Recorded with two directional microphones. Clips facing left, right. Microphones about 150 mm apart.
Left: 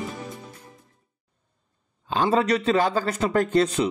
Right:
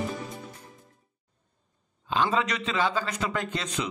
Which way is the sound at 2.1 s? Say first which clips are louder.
Left 5 dB; 40° left (ahead or behind).